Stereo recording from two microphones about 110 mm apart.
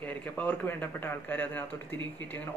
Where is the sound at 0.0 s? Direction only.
15° left (ahead or behind).